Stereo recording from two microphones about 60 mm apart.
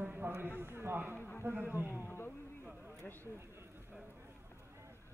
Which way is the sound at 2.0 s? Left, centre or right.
Left.